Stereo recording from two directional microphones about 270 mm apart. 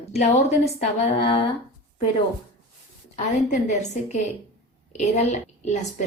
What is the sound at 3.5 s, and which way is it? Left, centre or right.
A woman's voice, left.